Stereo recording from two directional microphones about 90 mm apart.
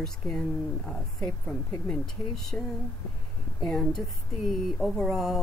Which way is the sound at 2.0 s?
5° left (ahead or behind).